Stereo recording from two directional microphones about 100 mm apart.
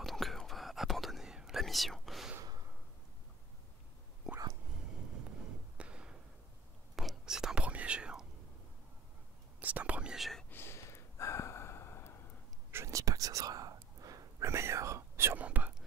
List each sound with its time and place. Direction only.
0.0 s whispering: centre (ahead or behind)
5.8 s a sound: 10° right (ahead or behind)
7.0 s whispering: 5° right (ahead or behind)
9.6 s whispering: 15° right (ahead or behind)
10.5 s gasp: 25° left (ahead or behind)
12.7 s whispering: 30° right (ahead or behind); by 15.7 s 15° right (ahead or behind)